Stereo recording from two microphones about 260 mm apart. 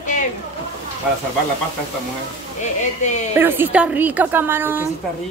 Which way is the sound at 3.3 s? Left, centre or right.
Centre.